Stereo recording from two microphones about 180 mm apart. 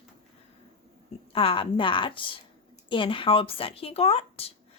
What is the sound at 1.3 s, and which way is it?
Speech, 30° left (ahead or behind).